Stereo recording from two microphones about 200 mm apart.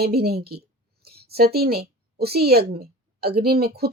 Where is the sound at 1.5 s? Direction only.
50° right (ahead or behind).